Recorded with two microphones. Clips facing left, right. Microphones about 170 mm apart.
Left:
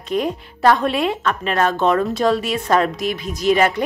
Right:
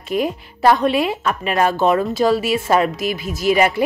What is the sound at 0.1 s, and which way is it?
A woman's voice, 5° right (ahead or behind).